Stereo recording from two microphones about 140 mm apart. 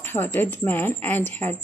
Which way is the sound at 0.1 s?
15° left (ahead or behind).